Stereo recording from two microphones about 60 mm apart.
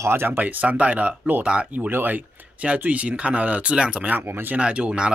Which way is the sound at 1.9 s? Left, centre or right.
Right.